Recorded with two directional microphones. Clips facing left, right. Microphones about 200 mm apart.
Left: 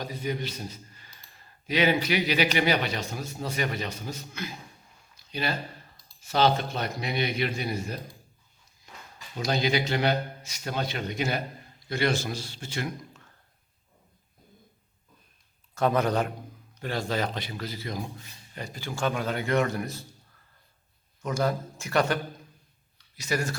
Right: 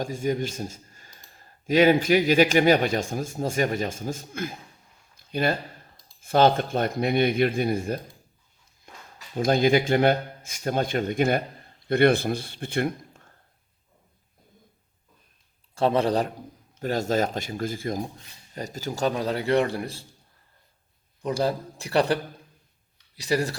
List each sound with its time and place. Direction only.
0.0 s speech: 45° right (ahead or behind)
5.1 s a sound: 50° right (ahead or behind)
6.1 s speech: 50° right (ahead or behind)
8.9 s a sound: 55° right (ahead or behind)
9.3 s a man's voice: 50° right (ahead or behind)
15.7 s a man's voice: 30° right (ahead or behind)
21.2 s a man's voice: 30° right (ahead or behind)